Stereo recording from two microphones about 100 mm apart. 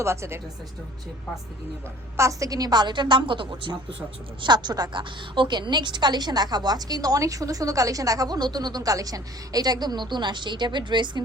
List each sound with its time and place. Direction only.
0.0 s speech: 25° right (ahead or behind)
2.1 s a woman's voice: 30° right (ahead or behind); by 11.2 s 50° right (ahead or behind)